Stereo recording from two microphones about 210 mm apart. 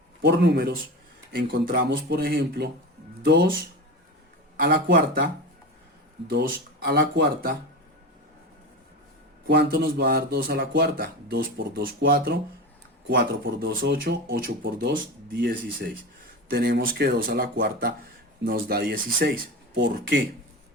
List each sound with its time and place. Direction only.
0.2 s speech: 55° right (ahead or behind)
4.5 s speech: 50° right (ahead or behind)
6.3 s speech: 50° right (ahead or behind)
9.5 s speech: 50° right (ahead or behind)
19.7 s speech: 60° right (ahead or behind)